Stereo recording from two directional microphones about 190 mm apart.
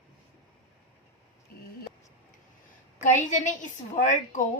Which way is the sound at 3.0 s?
40° left (ahead or behind).